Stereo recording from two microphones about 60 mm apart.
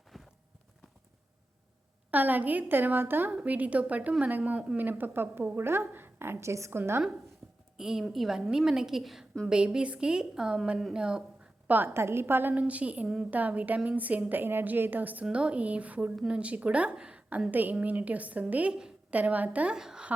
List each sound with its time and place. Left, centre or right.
0.1 s clip-clop: centre
2.0 s a woman's voice: right
3.4 s a woman's voice: right
6.7 s a woman's voice: right
7.8 s a woman's voice: centre
11.9 s a woman's voice: right
12.5 s a woman's voice: right
15.2 s a woman's voice: centre
17.5 s a woman's voice: right
19.7 s a woman's voice: centre